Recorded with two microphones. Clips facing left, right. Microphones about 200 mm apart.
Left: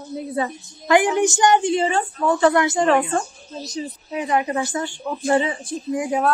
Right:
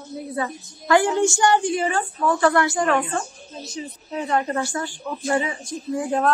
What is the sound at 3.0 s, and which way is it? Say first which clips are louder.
Speech: left 3 dB; 40° left (ahead or behind).